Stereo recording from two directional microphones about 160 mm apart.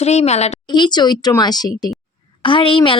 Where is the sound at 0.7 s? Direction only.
25° left (ahead or behind).